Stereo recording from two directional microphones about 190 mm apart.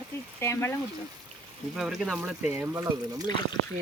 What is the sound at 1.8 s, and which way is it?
Speech, centre (ahead or behind).